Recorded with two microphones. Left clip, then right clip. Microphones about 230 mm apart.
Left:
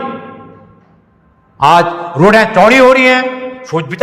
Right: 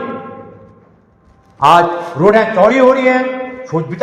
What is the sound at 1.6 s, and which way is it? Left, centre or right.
A man's voice, left.